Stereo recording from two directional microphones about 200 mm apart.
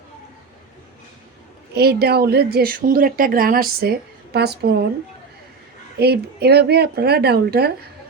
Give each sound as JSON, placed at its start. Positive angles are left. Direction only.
{"t": 1.7, "sound": "speech", "side_deg": -55}
{"t": 6.0, "sound": "speech", "side_deg": -55}